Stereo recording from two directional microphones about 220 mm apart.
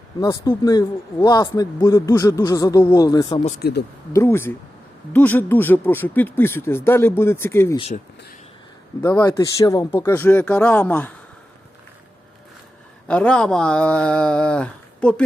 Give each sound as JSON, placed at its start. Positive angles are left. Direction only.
{"t": 0.2, "sound": "speech", "side_deg": 15}
{"t": 3.6, "sound": "speech", "side_deg": 50}
{"t": 4.1, "sound": "speech", "side_deg": 10}
{"t": 7.8, "sound": "speech", "side_deg": 30}
{"t": 9.1, "sound": "speech", "side_deg": 15}
{"t": 13.1, "sound": "speech", "side_deg": 5}